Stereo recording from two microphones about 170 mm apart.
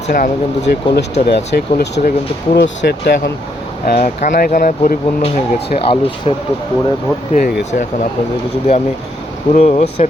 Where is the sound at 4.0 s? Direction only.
45° left (ahead or behind).